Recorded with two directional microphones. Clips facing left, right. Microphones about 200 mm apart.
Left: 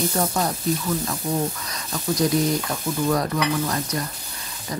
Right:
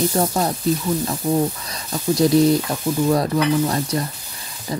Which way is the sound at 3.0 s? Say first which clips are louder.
Right 4 dB; 30° right (ahead or behind).